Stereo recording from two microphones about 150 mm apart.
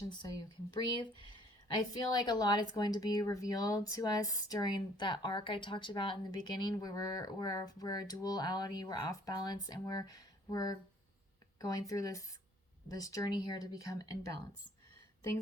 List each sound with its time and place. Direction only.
0.7 s speech: 30° left (ahead or behind)